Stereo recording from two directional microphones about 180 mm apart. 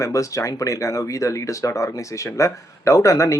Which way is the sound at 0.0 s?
15° left (ahead or behind).